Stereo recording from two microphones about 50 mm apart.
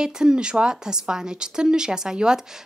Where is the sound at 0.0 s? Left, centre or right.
Centre.